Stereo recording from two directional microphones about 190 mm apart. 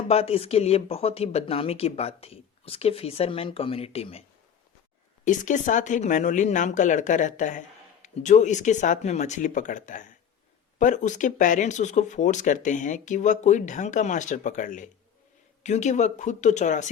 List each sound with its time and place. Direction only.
0.1 s speech: 30° left (ahead or behind)
5.2 s speech: 40° left (ahead or behind)